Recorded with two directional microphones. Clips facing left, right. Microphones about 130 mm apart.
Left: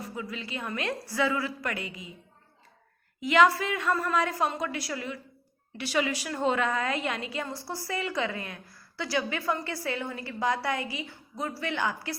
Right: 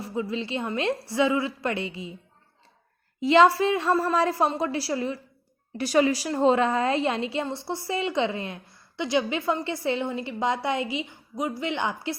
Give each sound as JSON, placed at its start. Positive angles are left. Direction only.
{"t": 0.0, "sound": "a woman's voice", "side_deg": -25}
{"t": 3.2, "sound": "a woman's voice", "side_deg": -30}